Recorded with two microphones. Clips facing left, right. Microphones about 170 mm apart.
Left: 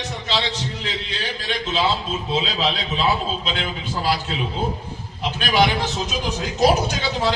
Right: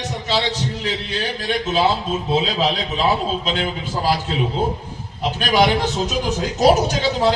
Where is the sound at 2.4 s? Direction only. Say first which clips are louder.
Right 1 dB; 45° right (ahead or behind).